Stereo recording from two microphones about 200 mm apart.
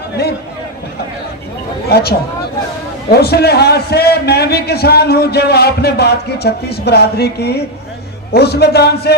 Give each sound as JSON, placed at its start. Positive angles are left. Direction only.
{"t": 1.9, "sound": "a man's voice", "side_deg": 55}